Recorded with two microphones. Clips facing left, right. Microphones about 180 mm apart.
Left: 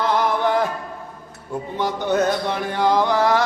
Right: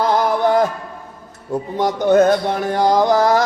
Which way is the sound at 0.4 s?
40° right (ahead or behind).